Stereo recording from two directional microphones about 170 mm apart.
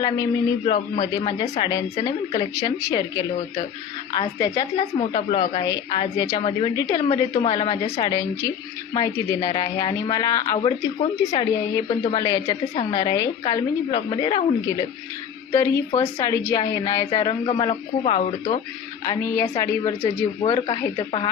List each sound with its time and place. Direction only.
0.0 s a woman's voice: 30° left (ahead or behind)
11.0 s speech: 35° left (ahead or behind)
12.0 s a woman's voice: 25° left (ahead or behind)
18.0 s speech: 40° left (ahead or behind)
19.0 s a woman's voice: 15° left (ahead or behind)